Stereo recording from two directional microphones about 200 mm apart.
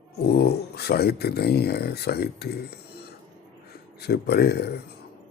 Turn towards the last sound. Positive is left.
turn(degrees=55)  # may be behind; listen again after turning